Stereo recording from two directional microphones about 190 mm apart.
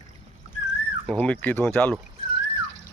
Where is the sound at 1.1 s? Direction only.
10° left (ahead or behind).